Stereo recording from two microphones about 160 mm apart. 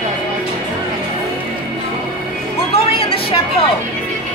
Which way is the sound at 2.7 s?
35° left (ahead or behind).